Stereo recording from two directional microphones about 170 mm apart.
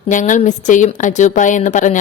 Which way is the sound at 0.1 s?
50° left (ahead or behind).